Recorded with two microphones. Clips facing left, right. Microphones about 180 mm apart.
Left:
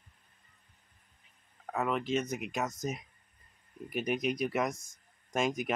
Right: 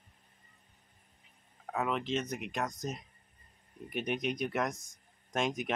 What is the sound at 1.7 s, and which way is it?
Speech, centre (ahead or behind).